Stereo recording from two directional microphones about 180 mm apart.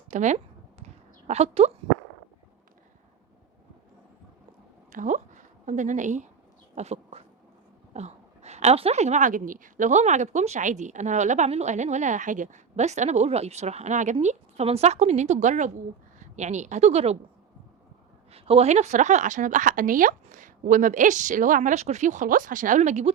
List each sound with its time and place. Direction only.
0.1 s a woman's voice: 40° right (ahead or behind)
4.9 s a woman's voice: 45° right (ahead or behind)
6.7 s a sound: 35° right (ahead or behind)
7.9 s a woman's voice: 40° right (ahead or behind)
18.3 s a woman's voice: 35° right (ahead or behind)